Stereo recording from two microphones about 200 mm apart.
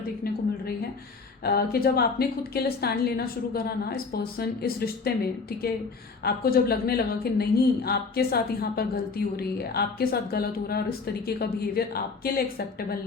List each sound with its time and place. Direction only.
1.5 s speech: 50° left (ahead or behind)